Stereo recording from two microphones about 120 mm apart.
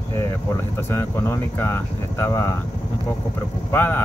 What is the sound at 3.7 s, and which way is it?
Speech, 15° left (ahead or behind).